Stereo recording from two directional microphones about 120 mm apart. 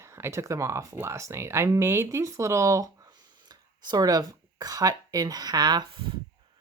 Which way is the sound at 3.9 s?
35° right (ahead or behind).